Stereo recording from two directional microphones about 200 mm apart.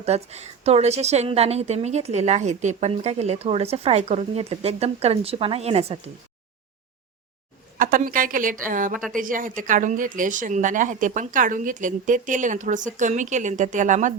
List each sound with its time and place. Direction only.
0.0 s a woman's voice: 35° right (ahead or behind)
7.8 s a woman's voice: 45° right (ahead or behind)
8.9 s a woman's voice: centre (ahead or behind)
9.1 s a woman's voice: 45° right (ahead or behind)